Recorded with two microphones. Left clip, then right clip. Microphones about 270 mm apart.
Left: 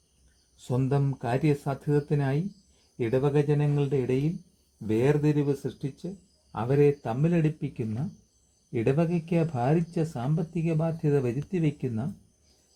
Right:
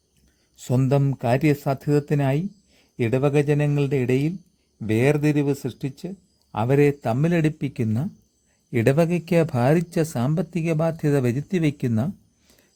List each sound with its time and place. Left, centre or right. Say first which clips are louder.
0.5 s speech: right 6 dB; right